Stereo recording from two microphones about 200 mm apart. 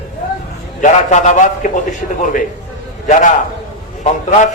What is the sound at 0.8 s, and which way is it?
A man's voice, 35° left (ahead or behind).